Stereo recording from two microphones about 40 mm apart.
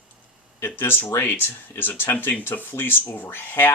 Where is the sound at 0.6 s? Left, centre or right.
Left.